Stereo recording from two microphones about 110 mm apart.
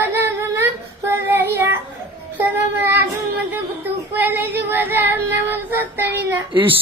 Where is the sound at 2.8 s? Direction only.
20° right (ahead or behind).